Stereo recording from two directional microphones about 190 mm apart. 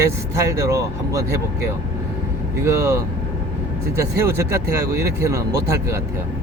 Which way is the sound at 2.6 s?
15° right (ahead or behind).